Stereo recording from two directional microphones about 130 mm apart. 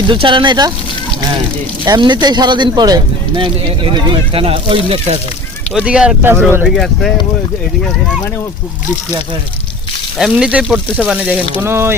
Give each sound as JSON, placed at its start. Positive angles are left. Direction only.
{"t": 0.1, "sound": "speech", "side_deg": -40}
{"t": 1.8, "sound": "speech", "side_deg": -35}
{"t": 5.7, "sound": "speech", "side_deg": -10}
{"t": 6.7, "sound": "speech", "side_deg": 5}
{"t": 10.2, "sound": "speech", "side_deg": -5}